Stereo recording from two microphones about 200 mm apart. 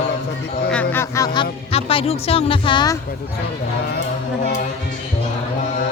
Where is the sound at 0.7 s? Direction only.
10° left (ahead or behind).